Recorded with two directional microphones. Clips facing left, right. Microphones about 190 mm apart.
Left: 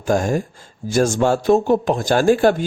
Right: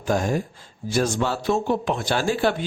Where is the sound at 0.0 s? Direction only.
45° left (ahead or behind).